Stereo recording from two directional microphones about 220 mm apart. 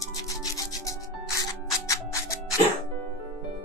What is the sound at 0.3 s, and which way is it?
Rub, 15° left (ahead or behind).